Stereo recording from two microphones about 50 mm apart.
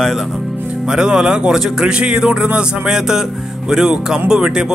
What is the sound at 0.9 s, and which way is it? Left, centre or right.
Speech, centre.